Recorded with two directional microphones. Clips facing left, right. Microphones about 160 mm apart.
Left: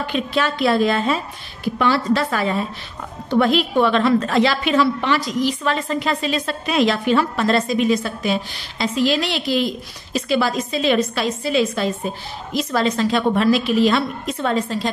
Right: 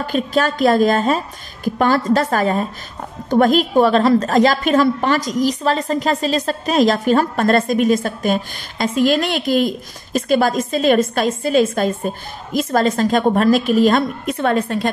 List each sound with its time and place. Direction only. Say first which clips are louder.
0.0 s a woman's voice: right 3 dB; 45° right (ahead or behind); by 14.9 s 60° right (ahead or behind)